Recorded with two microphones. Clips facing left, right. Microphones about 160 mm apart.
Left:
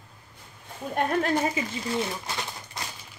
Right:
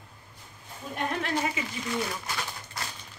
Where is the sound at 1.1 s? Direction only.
40° left (ahead or behind).